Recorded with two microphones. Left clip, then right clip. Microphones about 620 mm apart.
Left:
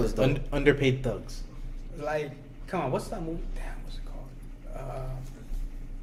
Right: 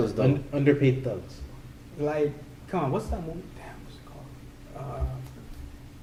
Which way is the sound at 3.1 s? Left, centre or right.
Left.